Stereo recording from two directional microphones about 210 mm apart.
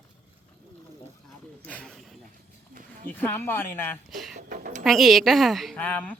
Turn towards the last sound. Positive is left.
turn(degrees=10)  # may be behind; listen again after turning